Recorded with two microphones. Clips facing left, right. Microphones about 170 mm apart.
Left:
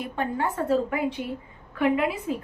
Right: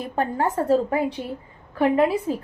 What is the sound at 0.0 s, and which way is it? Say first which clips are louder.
A woman's voice: right 4 dB; 40° right (ahead or behind).